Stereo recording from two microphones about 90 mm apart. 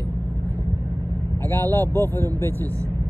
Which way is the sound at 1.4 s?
25° left (ahead or behind).